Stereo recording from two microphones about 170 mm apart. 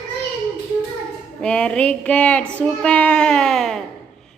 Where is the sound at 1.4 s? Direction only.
5° left (ahead or behind).